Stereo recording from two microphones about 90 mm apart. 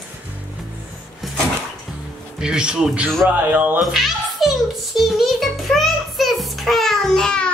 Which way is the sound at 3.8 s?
Centre (ahead or behind).